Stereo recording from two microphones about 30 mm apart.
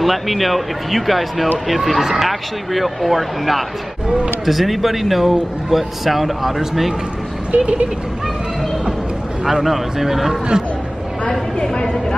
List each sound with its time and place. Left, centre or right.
0.0 s speech: centre
7.5 s speech: right
9.4 s a man's voice: centre
11.7 s speech: left